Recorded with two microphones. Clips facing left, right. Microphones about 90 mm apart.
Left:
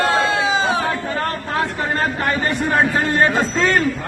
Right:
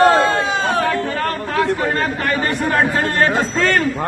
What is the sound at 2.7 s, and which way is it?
Speech, 15° left (ahead or behind).